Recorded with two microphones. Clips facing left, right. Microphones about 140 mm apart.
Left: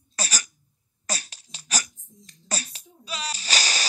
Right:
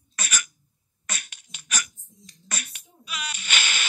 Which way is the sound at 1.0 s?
35° left (ahead or behind).